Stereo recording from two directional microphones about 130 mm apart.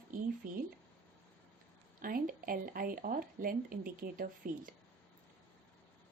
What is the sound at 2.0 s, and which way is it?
Speech, 90° right.